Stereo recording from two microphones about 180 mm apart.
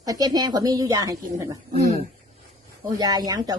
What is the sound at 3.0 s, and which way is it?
Speech, 20° right (ahead or behind).